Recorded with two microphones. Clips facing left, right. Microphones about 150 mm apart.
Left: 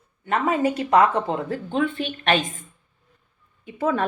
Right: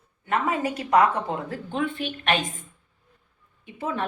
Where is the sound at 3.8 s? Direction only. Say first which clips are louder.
Left 6 dB; 75° left (ahead or behind).